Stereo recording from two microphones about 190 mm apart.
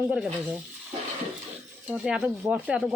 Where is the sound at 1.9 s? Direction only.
5° right (ahead or behind).